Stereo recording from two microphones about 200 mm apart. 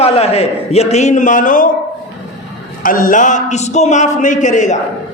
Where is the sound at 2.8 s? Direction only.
45° left (ahead or behind).